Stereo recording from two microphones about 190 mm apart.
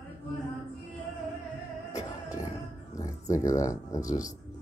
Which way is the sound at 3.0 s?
15° left (ahead or behind).